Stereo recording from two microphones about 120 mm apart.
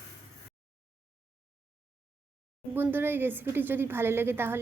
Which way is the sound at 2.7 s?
15° right (ahead or behind).